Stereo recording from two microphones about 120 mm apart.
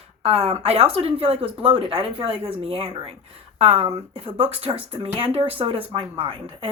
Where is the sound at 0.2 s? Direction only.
60° right (ahead or behind).